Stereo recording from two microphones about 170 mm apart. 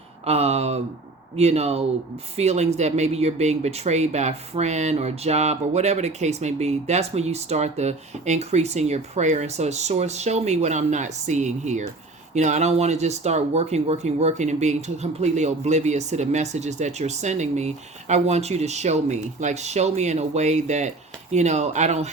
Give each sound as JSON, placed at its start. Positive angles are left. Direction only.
{"t": 0.3, "sound": "speech", "side_deg": -40}